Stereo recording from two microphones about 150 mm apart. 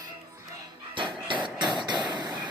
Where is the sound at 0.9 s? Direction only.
35° right (ahead or behind).